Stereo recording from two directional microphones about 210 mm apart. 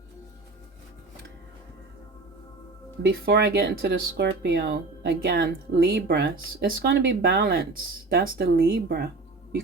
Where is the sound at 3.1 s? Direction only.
45° right (ahead or behind).